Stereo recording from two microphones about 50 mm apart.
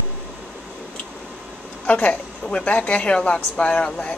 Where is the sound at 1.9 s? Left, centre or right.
Left.